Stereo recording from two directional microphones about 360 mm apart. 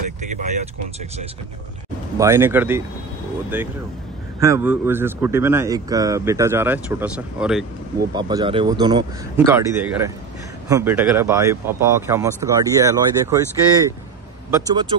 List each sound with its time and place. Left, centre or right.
0.2 s vehicle: centre
2.1 s speech: centre